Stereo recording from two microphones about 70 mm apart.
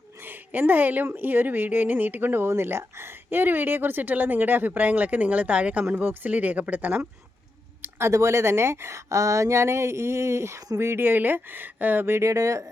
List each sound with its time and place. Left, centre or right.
0.2 s a woman's voice: right
7.8 s speech: right